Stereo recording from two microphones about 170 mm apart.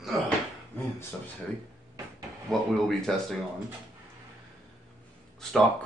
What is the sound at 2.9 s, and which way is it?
Speech, centre (ahead or behind).